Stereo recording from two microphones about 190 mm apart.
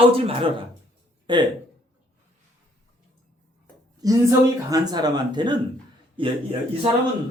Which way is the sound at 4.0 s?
20° right (ahead or behind).